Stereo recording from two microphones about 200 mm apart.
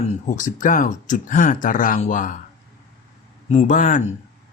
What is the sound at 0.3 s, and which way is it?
Speech, 40° left (ahead or behind).